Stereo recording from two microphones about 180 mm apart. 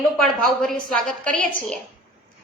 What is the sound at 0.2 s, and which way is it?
A woman's voice, centre (ahead or behind).